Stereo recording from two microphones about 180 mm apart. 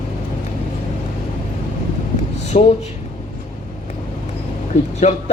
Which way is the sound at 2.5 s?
45° left (ahead or behind).